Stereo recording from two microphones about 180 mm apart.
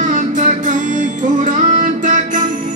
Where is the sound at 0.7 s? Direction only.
45° right (ahead or behind).